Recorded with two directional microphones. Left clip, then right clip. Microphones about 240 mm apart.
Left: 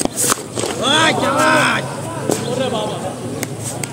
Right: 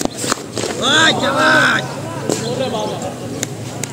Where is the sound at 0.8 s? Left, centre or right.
Centre.